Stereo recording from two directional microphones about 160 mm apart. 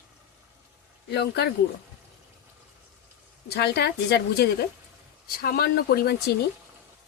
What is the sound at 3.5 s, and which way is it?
Speech, 90° left.